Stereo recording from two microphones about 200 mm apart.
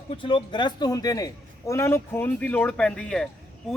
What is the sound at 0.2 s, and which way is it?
A man's voice, 25° left (ahead or behind).